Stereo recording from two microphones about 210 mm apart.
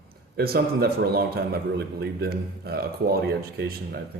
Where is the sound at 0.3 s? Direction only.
45° right (ahead or behind).